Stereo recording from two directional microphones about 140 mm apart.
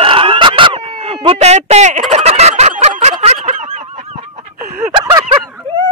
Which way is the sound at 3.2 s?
50° right (ahead or behind).